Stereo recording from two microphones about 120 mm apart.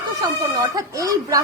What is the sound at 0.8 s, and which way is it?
Speech, 30° right (ahead or behind).